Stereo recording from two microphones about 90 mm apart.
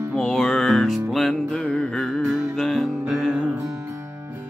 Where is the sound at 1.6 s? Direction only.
15° left (ahead or behind).